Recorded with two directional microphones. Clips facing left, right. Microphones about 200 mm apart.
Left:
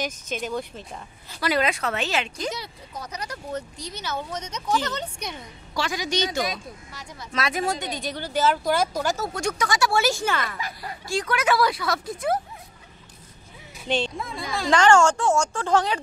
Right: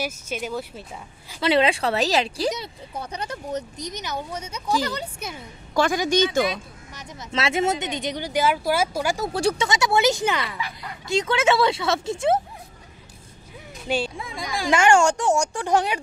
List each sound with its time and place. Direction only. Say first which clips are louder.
0.0 s speech: right 1 dB; 10° right (ahead or behind)
1.4 s speech: right 4 dB; 30° right (ahead or behind); by 5.4 s 5° right (ahead or behind)
5.8 s a woman's voice: right 6 dB; 50° right (ahead or behind)
6.9 s speech: right 6 dB; 20° right (ahead or behind)
9.3 s speech: right 4 dB; 30° right (ahead or behind)
13.8 s speech: even; 10° right (ahead or behind)